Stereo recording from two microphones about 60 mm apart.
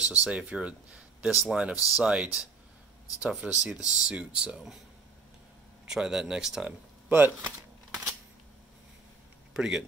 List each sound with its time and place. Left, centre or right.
0.1 s speech: centre
1.2 s speech: centre
5.9 s speech: centre
7.1 s speech: right
9.5 s speech: centre